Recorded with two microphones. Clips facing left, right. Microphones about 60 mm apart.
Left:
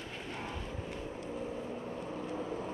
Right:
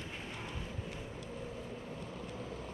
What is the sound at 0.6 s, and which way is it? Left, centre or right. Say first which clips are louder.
Vehicle: left 3 dB; centre.